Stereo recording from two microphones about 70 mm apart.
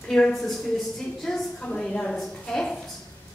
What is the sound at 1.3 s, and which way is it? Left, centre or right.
A woman's voice, centre.